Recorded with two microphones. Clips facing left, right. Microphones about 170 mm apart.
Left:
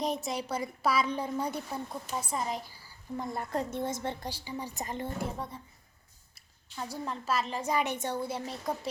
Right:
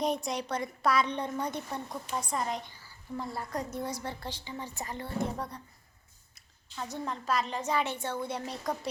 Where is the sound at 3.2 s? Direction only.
20° left (ahead or behind).